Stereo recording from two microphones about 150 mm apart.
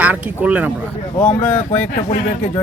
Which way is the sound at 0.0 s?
10° right (ahead or behind).